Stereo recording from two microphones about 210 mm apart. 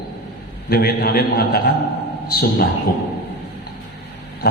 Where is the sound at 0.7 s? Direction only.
45° left (ahead or behind).